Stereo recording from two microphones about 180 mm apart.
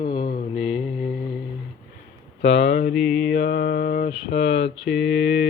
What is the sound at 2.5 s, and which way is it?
Speech, 75° left (ahead or behind).